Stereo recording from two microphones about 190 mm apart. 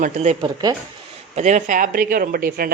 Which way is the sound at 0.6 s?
20° right (ahead or behind).